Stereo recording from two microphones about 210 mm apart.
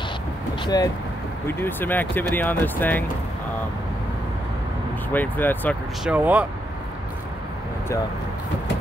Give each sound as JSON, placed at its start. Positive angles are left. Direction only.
{"t": 0.7, "sound": "speech", "side_deg": 20}
{"t": 5.1, "sound": "speech", "side_deg": 10}
{"t": 6.0, "sound": "speech", "side_deg": -10}